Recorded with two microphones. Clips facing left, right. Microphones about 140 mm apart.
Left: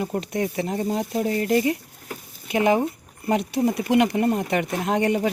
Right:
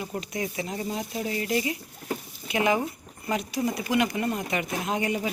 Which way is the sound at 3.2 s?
55° left (ahead or behind).